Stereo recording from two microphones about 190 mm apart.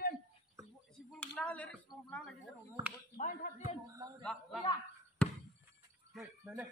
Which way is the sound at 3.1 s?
40° left (ahead or behind).